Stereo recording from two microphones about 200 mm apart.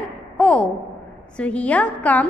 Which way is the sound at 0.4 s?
5° left (ahead or behind).